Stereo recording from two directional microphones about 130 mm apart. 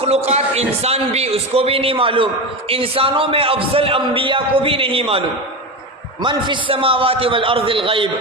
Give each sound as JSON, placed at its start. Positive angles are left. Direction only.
{"t": 0.0, "sound": "a man's voice", "side_deg": -55}
{"t": 6.2, "sound": "a man's voice", "side_deg": -40}